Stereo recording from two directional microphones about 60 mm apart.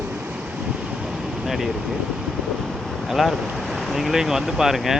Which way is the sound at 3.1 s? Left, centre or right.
Centre.